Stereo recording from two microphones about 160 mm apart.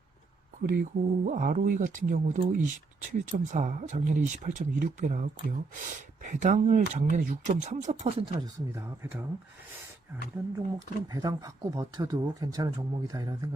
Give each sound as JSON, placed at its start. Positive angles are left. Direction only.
{"t": 0.6, "sound": "speech", "side_deg": -65}
{"t": 8.7, "sound": "speech", "side_deg": -15}
{"t": 10.8, "sound": "speech", "side_deg": -25}